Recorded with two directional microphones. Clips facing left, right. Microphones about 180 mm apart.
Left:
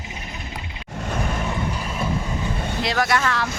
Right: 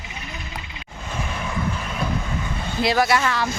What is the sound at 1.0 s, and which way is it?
Vehicle, 55° left (ahead or behind).